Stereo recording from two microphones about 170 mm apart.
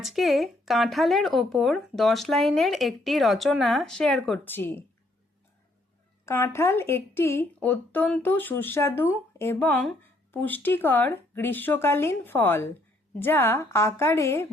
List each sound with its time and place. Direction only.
0.0 s speech: centre (ahead or behind)
6.2 s speech: 15° left (ahead or behind)